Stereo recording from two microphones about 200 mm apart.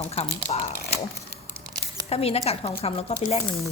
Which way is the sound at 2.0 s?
30° left (ahead or behind).